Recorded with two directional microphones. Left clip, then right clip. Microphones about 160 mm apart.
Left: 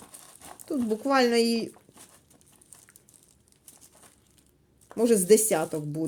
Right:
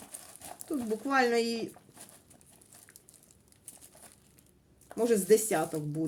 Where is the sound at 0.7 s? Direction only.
65° left (ahead or behind).